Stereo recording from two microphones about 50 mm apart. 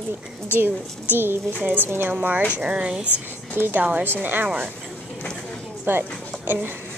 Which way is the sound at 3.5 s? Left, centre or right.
Right.